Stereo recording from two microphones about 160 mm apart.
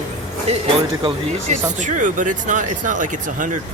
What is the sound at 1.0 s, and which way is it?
Speech, 45° right (ahead or behind).